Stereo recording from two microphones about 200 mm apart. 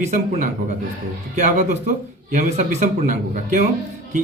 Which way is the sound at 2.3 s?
35° right (ahead or behind).